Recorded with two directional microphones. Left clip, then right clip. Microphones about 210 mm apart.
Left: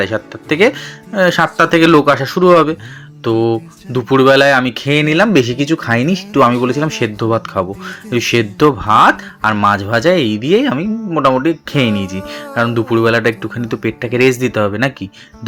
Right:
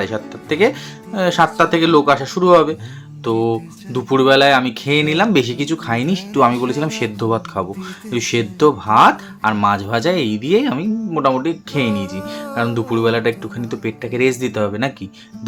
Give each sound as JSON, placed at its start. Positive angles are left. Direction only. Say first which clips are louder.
{"t": 0.0, "sound": "speech", "louder": "left 5 dB", "side_deg": 20}